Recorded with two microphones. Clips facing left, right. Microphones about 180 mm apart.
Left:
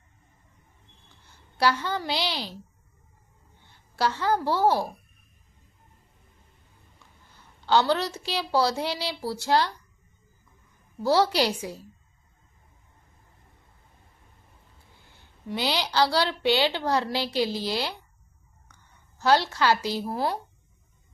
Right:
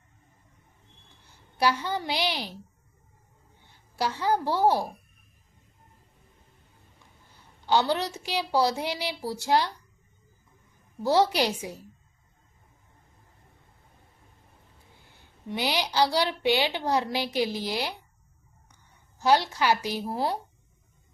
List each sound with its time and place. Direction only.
1.3 s a woman's voice: 15° right (ahead or behind)
3.6 s a woman's voice: 15° right (ahead or behind)
7.7 s a woman's voice: 15° right (ahead or behind)
11.0 s a woman's voice: 20° right (ahead or behind)
15.1 s a woman's voice: 15° right (ahead or behind)
19.2 s a woman's voice: 15° right (ahead or behind)